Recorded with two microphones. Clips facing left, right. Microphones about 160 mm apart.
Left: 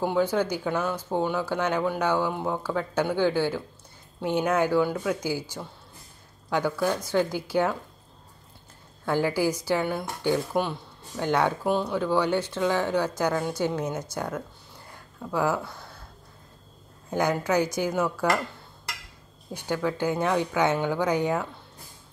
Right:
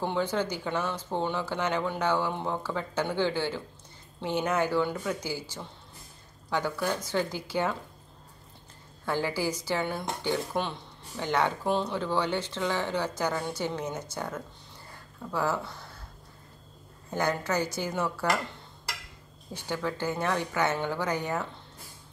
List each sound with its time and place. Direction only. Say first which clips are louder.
0.0 s speech: left 5 dB; 10° left (ahead or behind)
9.0 s speech: left 5 dB; 15° left (ahead or behind)
17.1 s speech: left 4 dB; 10° left (ahead or behind)
19.5 s speech: left 4 dB; 10° left (ahead or behind)